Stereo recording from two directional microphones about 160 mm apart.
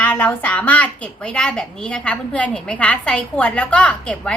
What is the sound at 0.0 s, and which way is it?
A woman's voice, 10° left (ahead or behind).